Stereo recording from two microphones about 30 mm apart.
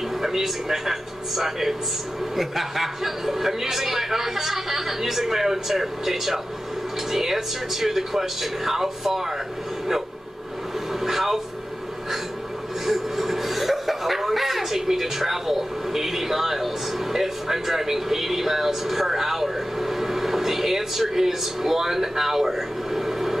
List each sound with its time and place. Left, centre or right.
0.2 s a man's voice: centre
11.1 s a sound: centre
12.8 s speech: centre